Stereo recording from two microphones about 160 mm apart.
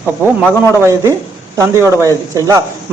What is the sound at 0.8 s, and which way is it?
A man's voice, 15° right (ahead or behind).